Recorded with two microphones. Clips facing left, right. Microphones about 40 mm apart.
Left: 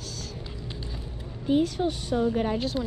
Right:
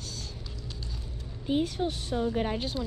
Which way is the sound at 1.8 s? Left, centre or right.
Centre.